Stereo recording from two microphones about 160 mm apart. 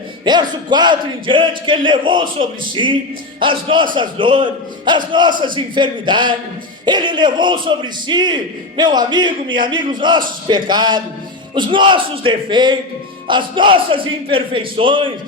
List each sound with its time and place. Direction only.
0.3 s a man's voice: 25° right (ahead or behind)